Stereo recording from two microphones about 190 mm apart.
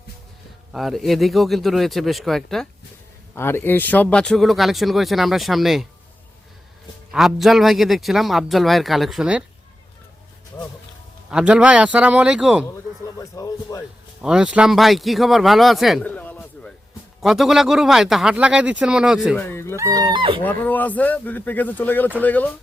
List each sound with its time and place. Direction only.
0.7 s speech: centre (ahead or behind)
3.3 s speech: 10° left (ahead or behind)
7.1 s speech: centre (ahead or behind)
11.3 s speech: 5° right (ahead or behind)
12.6 s a sound: 15° left (ahead or behind)
14.2 s speech: 5° right (ahead or behind)
19.4 s speech: 10° left (ahead or behind)
19.7 s speech: 20° right (ahead or behind)
20.4 s speech: 10° left (ahead or behind)